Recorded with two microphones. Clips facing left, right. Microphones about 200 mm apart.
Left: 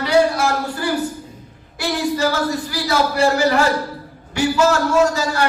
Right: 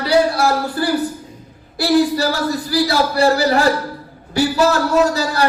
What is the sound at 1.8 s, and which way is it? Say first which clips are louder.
Speech: right 5 dB; 35° right (ahead or behind).